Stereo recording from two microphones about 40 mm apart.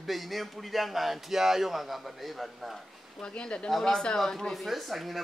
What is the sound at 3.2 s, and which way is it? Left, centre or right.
Speech, left.